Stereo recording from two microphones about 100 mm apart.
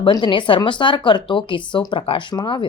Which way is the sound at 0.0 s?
55° left (ahead or behind).